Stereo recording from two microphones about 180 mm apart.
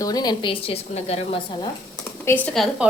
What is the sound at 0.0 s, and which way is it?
A woman's voice, 20° left (ahead or behind).